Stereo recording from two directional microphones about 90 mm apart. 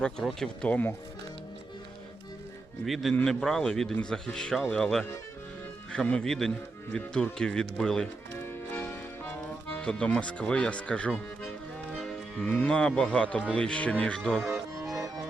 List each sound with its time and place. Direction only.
0.0 s speech: 5° left (ahead or behind)
2.8 s speech: centre (ahead or behind)
8.4 s music: 20° left (ahead or behind)
9.8 s speech: 10° left (ahead or behind)
11.9 s music: 10° left (ahead or behind)
12.5 s speech: 15° left (ahead or behind)
14.4 s music: 30° right (ahead or behind)